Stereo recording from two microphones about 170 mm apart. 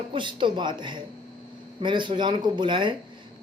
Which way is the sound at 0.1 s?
30° right (ahead or behind).